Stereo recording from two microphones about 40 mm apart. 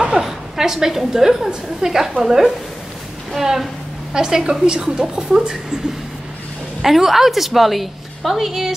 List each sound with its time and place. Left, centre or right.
0.0 s a woman's voice: centre
6.8 s a woman's voice: centre